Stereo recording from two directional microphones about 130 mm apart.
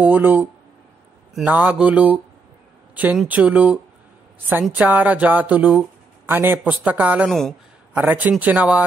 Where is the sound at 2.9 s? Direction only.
10° right (ahead or behind).